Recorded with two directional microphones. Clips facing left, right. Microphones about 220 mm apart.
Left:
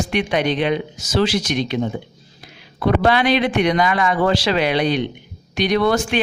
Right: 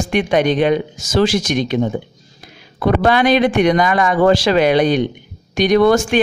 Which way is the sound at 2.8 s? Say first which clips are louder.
Right 2 dB; 45° right (ahead or behind).